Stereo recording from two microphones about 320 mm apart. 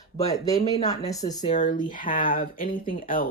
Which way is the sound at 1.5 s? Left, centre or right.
Left.